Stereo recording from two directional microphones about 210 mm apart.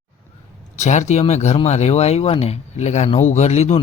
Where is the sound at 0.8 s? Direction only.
35° left (ahead or behind).